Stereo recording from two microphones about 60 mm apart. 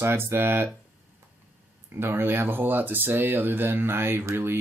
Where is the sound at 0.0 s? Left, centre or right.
Right.